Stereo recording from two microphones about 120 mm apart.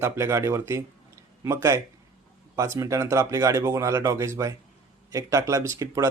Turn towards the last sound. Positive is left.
turn(degrees=-25)  # may be behind; listen again after turning